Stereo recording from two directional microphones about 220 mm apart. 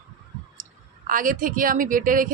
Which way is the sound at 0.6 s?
35° right (ahead or behind).